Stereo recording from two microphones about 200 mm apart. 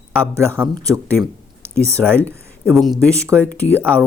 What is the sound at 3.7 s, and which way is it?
Speech, 10° right (ahead or behind).